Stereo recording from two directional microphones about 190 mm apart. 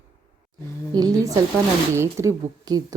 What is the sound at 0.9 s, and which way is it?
A woman's voice, 20° right (ahead or behind).